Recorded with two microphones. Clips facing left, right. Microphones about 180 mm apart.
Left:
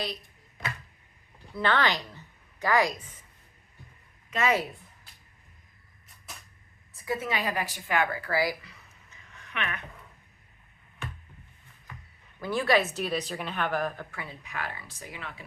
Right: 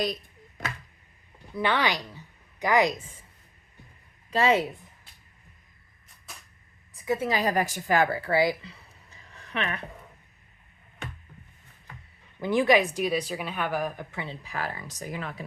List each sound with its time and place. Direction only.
1.5 s a woman's voice: 10° right (ahead or behind); by 3.2 s 25° right (ahead or behind)
4.3 s a woman's voice: 30° right (ahead or behind)
6.9 s a sound: 20° right (ahead or behind)
7.3 s speech: 40° right (ahead or behind)
12.4 s speech: 20° right (ahead or behind); by 15.4 s 40° right (ahead or behind)